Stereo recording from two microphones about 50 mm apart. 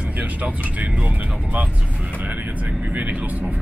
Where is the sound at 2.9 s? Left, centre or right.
Right.